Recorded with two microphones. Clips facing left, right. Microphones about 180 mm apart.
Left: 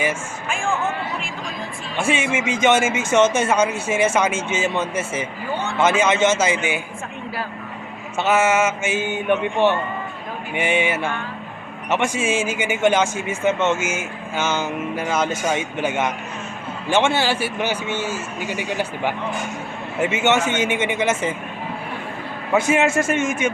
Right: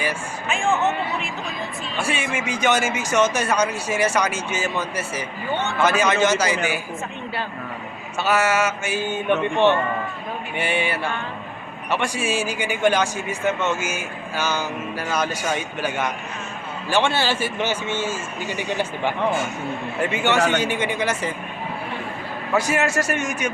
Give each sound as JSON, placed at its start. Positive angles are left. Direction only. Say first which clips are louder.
{"t": 2.0, "sound": "a man's voice", "louder": "left 5 dB", "side_deg": 25}
{"t": 8.2, "sound": "a man's voice", "louder": "left 2 dB", "side_deg": 25}
{"t": 10.5, "sound": "a man's voice", "louder": "left 4 dB", "side_deg": 20}
{"t": 22.5, "sound": "a man's voice", "louder": "left 3 dB", "side_deg": 25}